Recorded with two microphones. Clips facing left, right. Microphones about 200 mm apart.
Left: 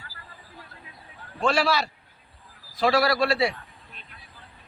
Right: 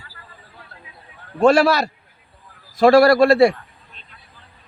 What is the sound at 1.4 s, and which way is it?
A man's voice, 45° right (ahead or behind).